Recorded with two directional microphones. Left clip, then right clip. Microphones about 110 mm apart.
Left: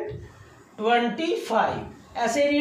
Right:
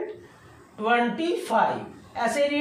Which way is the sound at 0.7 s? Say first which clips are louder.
Left 1 dB; centre (ahead or behind).